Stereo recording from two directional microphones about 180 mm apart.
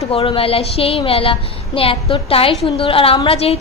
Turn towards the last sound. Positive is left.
turn(degrees=35)  # may be behind; listen again after turning